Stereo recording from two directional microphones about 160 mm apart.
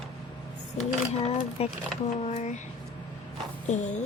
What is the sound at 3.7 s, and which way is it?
Speech, 50° left (ahead or behind).